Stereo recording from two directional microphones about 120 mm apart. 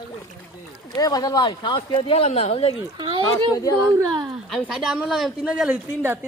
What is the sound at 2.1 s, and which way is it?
Speech, 60° left (ahead or behind).